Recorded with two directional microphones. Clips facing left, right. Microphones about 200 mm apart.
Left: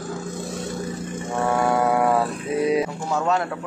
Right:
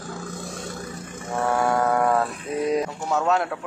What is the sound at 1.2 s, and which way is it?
Mantra, centre (ahead or behind).